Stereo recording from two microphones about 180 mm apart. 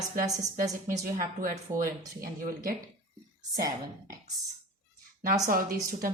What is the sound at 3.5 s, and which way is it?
Speech, 20° right (ahead or behind).